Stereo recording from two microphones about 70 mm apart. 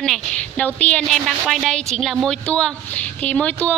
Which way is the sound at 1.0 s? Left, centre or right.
Centre.